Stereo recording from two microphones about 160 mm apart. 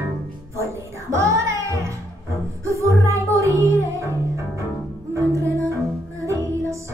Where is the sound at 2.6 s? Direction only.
20° right (ahead or behind).